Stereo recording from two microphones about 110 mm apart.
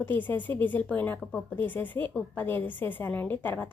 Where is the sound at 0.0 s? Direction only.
15° left (ahead or behind).